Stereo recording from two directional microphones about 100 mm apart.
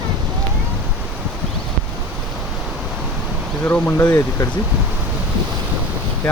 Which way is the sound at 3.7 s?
20° left (ahead or behind).